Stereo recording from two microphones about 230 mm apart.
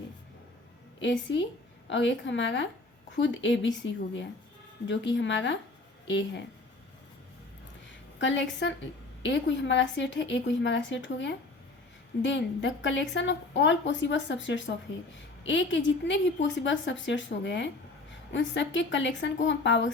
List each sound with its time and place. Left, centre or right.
1.9 s a woman's voice: left
8.2 s a woman's voice: left